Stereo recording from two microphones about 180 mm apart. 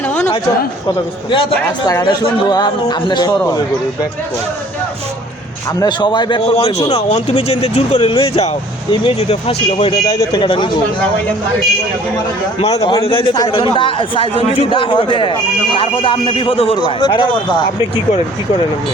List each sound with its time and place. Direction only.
1.6 s a man's voice: 20° left (ahead or behind)
5.8 s a man's voice: 25° left (ahead or behind)
10.1 s a man's voice: 20° left (ahead or behind)
12.5 s a man's voice: 35° left (ahead or behind)